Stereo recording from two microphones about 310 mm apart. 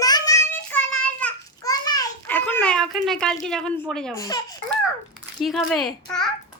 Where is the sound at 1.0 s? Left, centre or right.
Centre.